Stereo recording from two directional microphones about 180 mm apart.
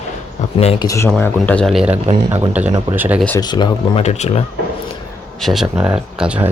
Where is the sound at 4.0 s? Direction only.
35° left (ahead or behind).